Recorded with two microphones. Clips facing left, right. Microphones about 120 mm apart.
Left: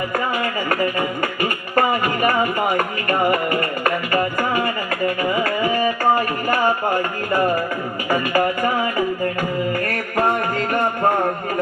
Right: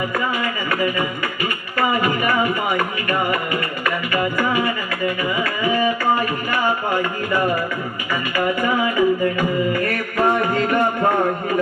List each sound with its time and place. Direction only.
2.2 s music: 45° left (ahead or behind)
8.1 s music: 45° left (ahead or behind)